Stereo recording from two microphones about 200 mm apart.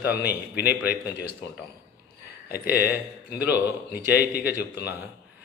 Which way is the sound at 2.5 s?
55° left (ahead or behind).